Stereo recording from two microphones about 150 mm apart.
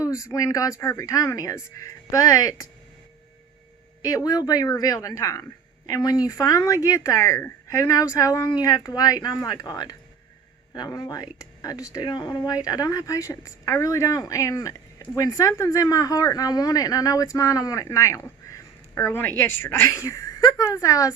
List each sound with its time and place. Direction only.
0.0 s speech: 20° left (ahead or behind)
4.0 s speech: 25° left (ahead or behind)